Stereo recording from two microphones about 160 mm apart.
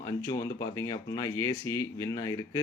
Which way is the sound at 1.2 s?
20° left (ahead or behind).